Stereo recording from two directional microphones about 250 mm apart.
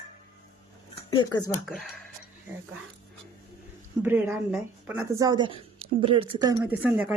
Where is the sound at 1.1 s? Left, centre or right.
Centre.